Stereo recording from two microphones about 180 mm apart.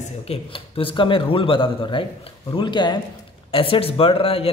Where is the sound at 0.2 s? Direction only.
30° left (ahead or behind).